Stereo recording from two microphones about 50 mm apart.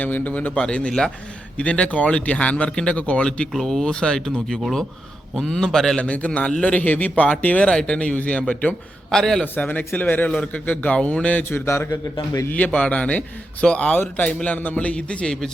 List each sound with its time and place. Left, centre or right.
0.0 s a man's voice: left
0.6 s speech: centre
3.5 s speech: centre
3.8 s speech: centre
6.0 s speech: left
9.0 s a man's voice: centre
9.6 s a man's voice: left
12.5 s a man's voice: left; by 15.4 s centre